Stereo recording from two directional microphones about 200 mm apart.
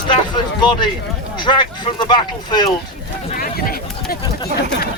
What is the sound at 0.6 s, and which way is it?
Speech, 20° left (ahead or behind).